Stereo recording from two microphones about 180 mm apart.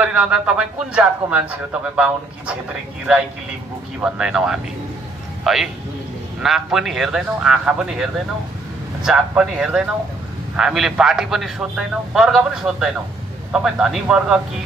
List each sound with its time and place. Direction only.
0.0 s speech: 5° right (ahead or behind)
4.0 s speech: 5° right (ahead or behind)